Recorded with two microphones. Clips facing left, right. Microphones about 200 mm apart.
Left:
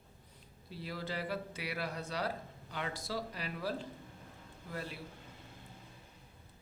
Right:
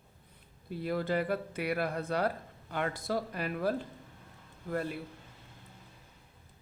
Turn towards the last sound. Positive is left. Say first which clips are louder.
# right 9 dB
turn(degrees=-55)  # may be behind; listen again after turning